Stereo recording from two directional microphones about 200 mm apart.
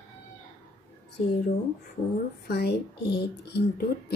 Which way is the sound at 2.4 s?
55° left (ahead or behind).